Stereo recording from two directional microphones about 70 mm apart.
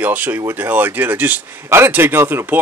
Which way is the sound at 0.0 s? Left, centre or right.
Right.